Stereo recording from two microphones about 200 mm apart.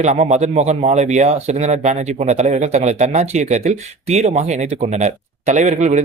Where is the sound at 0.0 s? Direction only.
35° right (ahead or behind).